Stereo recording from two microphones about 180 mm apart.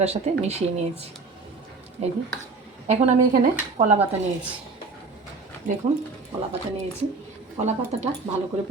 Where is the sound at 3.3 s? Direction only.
50° right (ahead or behind).